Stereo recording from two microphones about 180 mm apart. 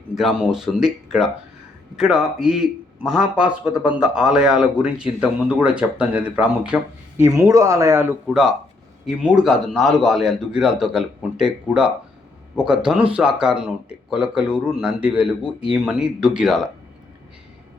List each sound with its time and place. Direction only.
0.1 s a man's voice: centre (ahead or behind)
7.3 s speech: 15° right (ahead or behind)
9.0 s a man's voice: centre (ahead or behind)